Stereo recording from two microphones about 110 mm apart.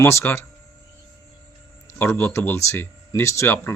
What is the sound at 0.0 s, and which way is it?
Speech, 25° left (ahead or behind).